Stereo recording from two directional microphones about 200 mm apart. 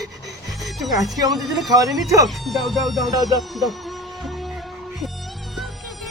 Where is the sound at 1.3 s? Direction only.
Centre (ahead or behind).